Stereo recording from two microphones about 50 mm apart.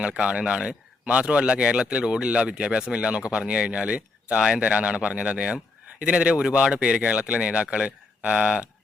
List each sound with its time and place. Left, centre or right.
0.0 s speech: centre